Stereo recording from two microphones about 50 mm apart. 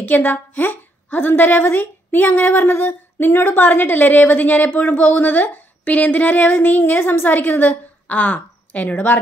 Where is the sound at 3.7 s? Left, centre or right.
Left.